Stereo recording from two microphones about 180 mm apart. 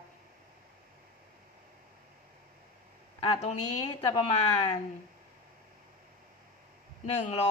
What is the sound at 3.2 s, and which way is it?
Speech, 35° left (ahead or behind).